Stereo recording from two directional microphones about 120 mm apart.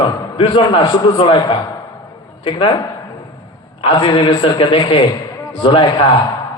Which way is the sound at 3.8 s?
45° left (ahead or behind).